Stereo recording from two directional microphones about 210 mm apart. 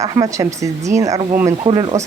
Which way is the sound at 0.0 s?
15° right (ahead or behind).